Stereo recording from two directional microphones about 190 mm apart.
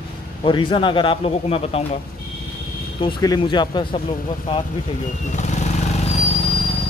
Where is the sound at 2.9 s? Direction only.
25° left (ahead or behind).